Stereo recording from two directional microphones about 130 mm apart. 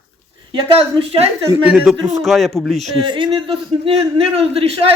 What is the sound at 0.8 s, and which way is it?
Speech, 45° right (ahead or behind).